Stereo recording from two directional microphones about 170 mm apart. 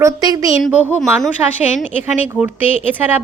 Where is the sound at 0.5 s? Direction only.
Centre (ahead or behind).